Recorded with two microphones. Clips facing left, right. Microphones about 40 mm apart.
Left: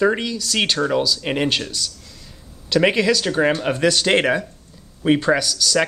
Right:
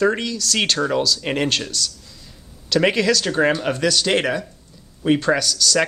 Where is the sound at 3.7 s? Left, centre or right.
Left.